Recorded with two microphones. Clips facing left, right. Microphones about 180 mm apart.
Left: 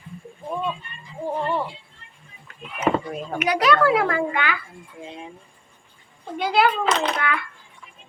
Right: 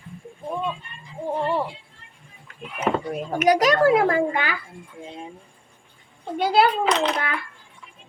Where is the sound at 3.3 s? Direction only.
40° right (ahead or behind).